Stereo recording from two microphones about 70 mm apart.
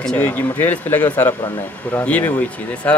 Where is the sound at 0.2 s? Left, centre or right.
Left.